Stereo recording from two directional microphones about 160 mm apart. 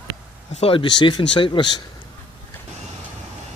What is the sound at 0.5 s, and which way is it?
Speech, 35° left (ahead or behind).